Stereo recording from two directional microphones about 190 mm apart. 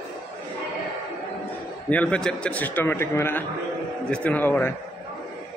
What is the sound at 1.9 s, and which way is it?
A man's voice, 5° left (ahead or behind).